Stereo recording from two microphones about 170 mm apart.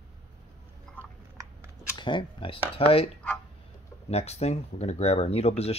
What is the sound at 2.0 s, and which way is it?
Speech, 25° left (ahead or behind).